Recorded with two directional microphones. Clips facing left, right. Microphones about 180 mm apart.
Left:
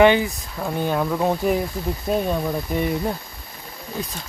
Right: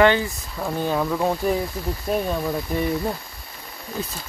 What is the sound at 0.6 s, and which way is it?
Speech, centre (ahead or behind).